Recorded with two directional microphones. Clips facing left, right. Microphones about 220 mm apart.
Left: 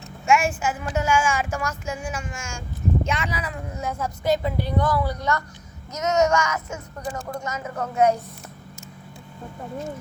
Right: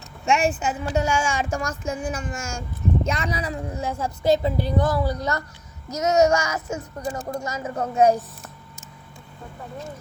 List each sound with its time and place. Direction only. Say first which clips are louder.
0.3 s a woman's voice: even; 35° right (ahead or behind)
4.8 s speech: even; 45° right (ahead or behind)
6.0 s a woman's voice: right 2 dB; 30° right (ahead or behind)